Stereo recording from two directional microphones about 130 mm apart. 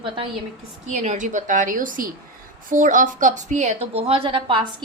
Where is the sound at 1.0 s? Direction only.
70° right (ahead or behind).